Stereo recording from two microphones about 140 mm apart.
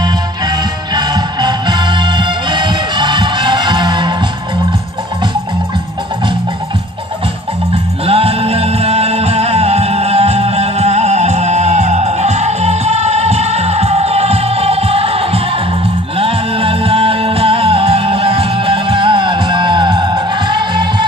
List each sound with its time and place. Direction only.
0.9 s music: 30° right (ahead or behind)
8.1 s music: 45° right (ahead or behind)